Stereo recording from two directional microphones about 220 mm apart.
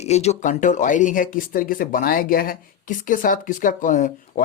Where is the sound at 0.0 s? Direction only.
30° left (ahead or behind).